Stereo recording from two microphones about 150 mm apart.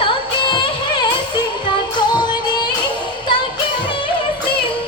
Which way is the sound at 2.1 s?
30° left (ahead or behind).